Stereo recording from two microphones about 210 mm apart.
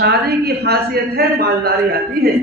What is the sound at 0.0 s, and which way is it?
A man's voice, 50° right (ahead or behind).